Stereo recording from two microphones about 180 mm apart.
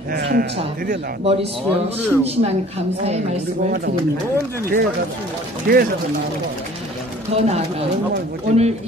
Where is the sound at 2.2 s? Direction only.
35° right (ahead or behind).